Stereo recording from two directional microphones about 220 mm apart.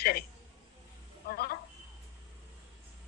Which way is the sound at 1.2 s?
45° left (ahead or behind).